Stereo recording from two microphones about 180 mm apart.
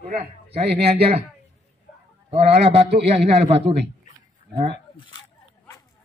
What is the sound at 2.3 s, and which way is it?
A man's voice, 35° right (ahead or behind).